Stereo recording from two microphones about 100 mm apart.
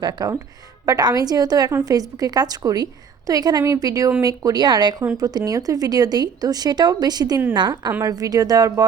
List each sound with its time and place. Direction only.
0.0 s speech: 45° right (ahead or behind)